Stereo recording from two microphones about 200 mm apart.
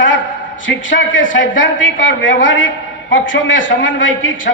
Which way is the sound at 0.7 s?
70° left (ahead or behind).